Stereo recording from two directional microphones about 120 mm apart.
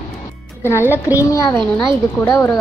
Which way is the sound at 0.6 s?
20° left (ahead or behind).